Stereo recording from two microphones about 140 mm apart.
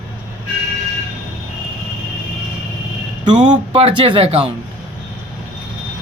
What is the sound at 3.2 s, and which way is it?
Speech, 35° right (ahead or behind).